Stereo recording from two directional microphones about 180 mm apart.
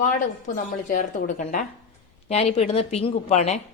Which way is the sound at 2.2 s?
35° left (ahead or behind).